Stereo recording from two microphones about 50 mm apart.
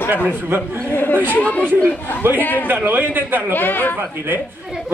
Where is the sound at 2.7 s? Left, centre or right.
Right.